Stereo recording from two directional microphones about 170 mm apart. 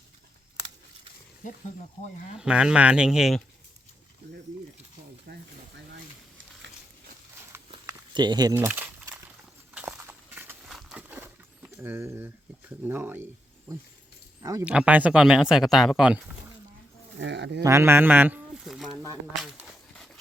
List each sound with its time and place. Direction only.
2.4 s speech: 5° right (ahead or behind)
5.3 s speech: 65° right (ahead or behind)
7.9 s walk: 25° right (ahead or behind); by 9.2 s 10° right (ahead or behind)
9.7 s a sound: 10° right (ahead or behind)
10.7 s a sound: centre (ahead or behind)
14.6 s speech: 5° right (ahead or behind)
17.2 s speech: 90° right
17.6 s speech: 15° right (ahead or behind)
19.4 s a sound: 5° right (ahead or behind)